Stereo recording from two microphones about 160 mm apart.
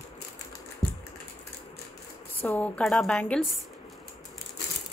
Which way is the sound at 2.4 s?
10° left (ahead or behind).